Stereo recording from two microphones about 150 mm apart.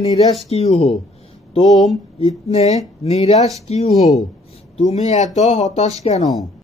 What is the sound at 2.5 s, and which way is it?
A man's voice, 45° left (ahead or behind).